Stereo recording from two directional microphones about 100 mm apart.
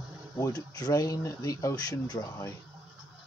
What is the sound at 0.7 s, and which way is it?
Speech, 40° left (ahead or behind).